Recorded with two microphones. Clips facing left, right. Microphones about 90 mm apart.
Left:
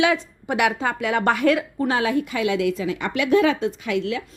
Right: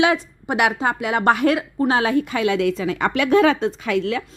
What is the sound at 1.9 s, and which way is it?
Speech, 35° right (ahead or behind).